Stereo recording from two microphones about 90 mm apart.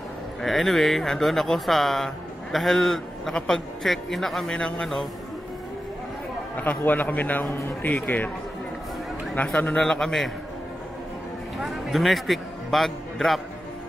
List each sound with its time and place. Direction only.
0.4 s speech: centre (ahead or behind)
6.5 s a man's voice: 20° left (ahead or behind)
9.3 s speech: 20° left (ahead or behind)
9.8 s speech: 5° left (ahead or behind)
11.5 s a man's voice: centre (ahead or behind)